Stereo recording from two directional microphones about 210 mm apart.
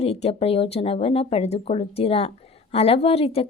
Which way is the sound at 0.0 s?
30° left (ahead or behind).